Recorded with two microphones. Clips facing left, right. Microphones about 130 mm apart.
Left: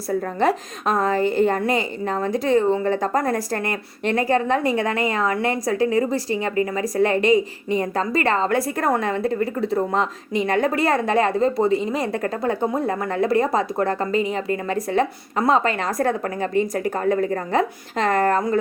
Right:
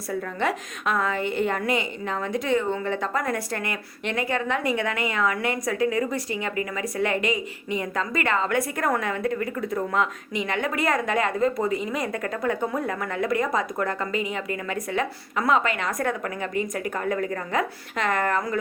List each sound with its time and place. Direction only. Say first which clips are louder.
0.1 s a woman's voice: left 6 dB; 40° left (ahead or behind)